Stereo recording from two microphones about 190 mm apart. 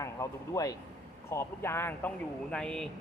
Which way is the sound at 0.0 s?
15° left (ahead or behind).